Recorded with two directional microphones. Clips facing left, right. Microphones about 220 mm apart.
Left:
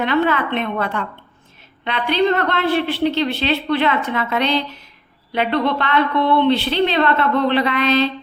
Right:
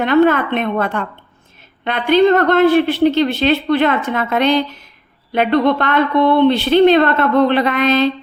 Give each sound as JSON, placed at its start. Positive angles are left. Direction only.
{"t": 0.0, "sound": "a woman's voice", "side_deg": -45}